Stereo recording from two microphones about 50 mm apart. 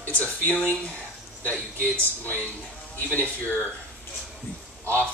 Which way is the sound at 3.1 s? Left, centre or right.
Left.